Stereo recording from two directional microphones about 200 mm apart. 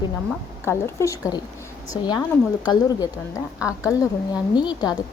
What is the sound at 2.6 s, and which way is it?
A woman's voice, 20° left (ahead or behind).